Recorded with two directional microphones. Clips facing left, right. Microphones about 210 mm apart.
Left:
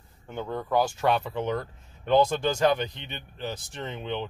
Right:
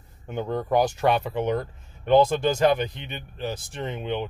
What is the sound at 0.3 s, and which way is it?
Speech, 15° right (ahead or behind).